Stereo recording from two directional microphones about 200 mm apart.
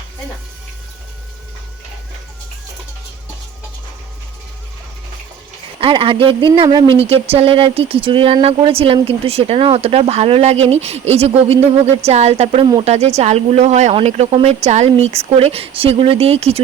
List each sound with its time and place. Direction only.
5.8 s speech: 25° right (ahead or behind)